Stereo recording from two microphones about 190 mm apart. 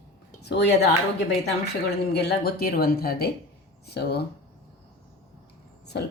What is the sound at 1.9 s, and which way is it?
Speech, 60° left (ahead or behind).